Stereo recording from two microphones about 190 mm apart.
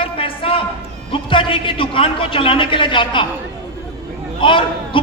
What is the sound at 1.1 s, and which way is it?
A man's voice, 25° left (ahead or behind).